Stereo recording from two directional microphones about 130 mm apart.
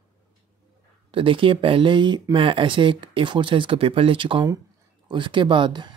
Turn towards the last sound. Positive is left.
turn(degrees=-35)  # may be behind; listen again after turning